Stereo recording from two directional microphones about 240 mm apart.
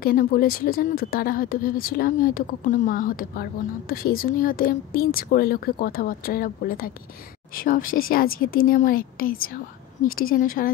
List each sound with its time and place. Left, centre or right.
0.0 s speech: left